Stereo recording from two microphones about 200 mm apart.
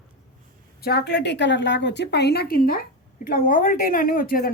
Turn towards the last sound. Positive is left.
turn(degrees=45)  # may be behind; listen again after turning